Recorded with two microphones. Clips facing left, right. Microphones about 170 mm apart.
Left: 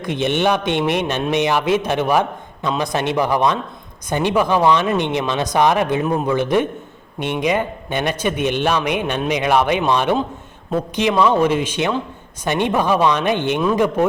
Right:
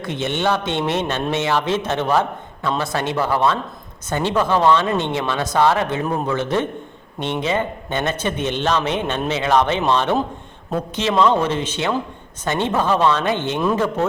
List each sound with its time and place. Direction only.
0.0 s a man's voice: 15° left (ahead or behind)